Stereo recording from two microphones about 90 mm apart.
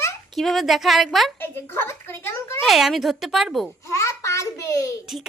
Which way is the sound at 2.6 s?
Centre (ahead or behind).